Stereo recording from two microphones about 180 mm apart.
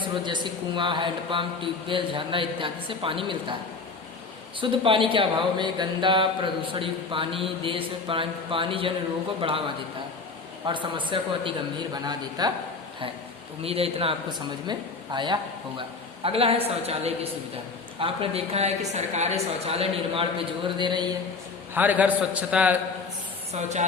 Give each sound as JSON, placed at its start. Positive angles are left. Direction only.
{"t": 0.8, "sound": "speech", "side_deg": -25}
{"t": 4.6, "sound": "speech", "side_deg": -30}
{"t": 10.7, "sound": "speech", "side_deg": -25}
{"t": 13.6, "sound": "a woman's voice", "side_deg": -35}
{"t": 21.8, "sound": "a man's voice", "side_deg": -10}
{"t": 23.5, "sound": "a woman's voice", "side_deg": -40}